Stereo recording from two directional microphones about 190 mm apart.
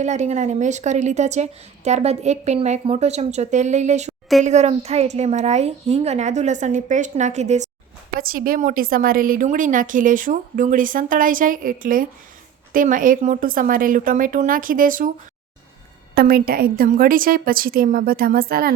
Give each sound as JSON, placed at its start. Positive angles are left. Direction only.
{"t": 0.0, "sound": "a woman's voice", "side_deg": -40}
{"t": 8.2, "sound": "a woman's voice", "side_deg": -50}
{"t": 16.1, "sound": "a woman's voice", "side_deg": -50}